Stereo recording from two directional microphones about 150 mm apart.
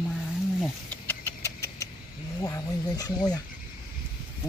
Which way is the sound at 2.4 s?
20° left (ahead or behind).